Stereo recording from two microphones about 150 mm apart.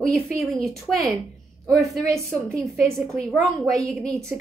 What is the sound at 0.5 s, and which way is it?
Speech, centre (ahead or behind).